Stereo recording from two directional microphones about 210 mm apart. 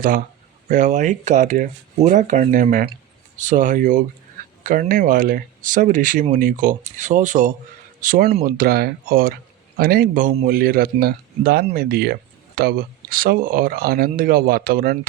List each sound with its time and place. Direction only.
0.7 s speech: 35° right (ahead or behind)